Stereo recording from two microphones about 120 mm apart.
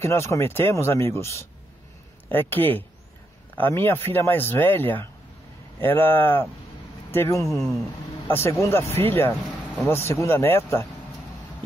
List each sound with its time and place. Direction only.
0.0 s speech: 25° left (ahead or behind)